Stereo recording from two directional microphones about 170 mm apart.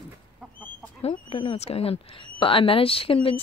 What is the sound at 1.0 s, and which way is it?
Speech, 35° left (ahead or behind).